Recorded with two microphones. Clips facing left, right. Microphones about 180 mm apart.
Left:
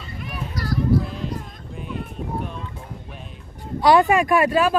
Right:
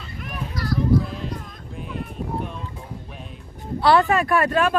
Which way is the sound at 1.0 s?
Centre (ahead or behind).